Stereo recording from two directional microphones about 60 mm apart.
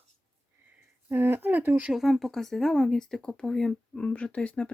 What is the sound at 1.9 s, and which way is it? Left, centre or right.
Speech, centre.